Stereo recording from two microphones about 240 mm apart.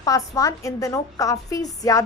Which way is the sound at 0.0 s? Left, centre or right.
Centre.